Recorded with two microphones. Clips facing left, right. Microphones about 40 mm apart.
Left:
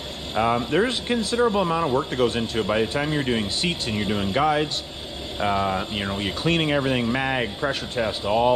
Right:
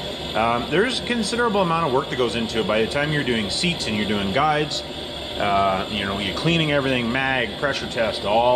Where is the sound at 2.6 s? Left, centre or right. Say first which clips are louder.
Right 3 dB; right.